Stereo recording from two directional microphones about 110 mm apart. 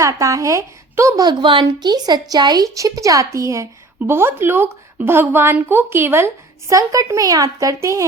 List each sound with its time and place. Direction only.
0.0 s speech: 30° right (ahead or behind)
1.2 s a woman's voice: 45° right (ahead or behind)